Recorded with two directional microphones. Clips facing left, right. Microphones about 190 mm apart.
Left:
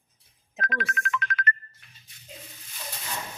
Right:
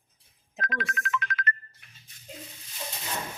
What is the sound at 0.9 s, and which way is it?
Music, 55° left (ahead or behind).